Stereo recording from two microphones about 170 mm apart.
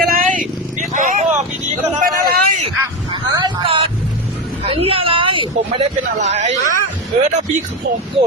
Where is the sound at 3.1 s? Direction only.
30° right (ahead or behind).